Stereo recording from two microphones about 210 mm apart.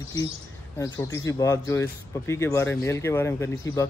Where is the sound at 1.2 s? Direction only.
15° left (ahead or behind).